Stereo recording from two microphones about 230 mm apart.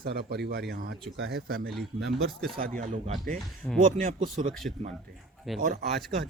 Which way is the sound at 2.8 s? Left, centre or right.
Right.